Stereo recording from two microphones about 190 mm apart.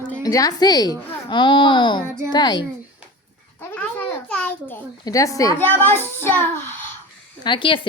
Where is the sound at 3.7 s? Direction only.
10° left (ahead or behind).